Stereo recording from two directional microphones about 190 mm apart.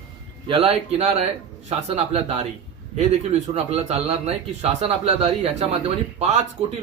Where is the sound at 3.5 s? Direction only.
35° right (ahead or behind).